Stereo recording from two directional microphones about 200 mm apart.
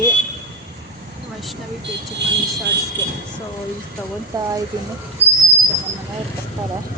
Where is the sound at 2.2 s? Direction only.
60° right (ahead or behind).